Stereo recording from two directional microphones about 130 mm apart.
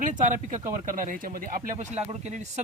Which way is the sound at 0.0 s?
80° right.